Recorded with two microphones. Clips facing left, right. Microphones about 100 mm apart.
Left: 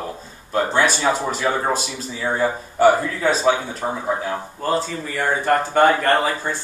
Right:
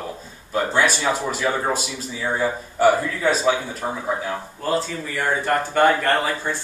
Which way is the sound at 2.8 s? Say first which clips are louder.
Left 2 dB; 20° left (ahead or behind).